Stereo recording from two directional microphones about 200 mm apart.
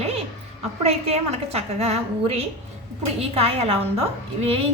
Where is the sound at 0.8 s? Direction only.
30° right (ahead or behind).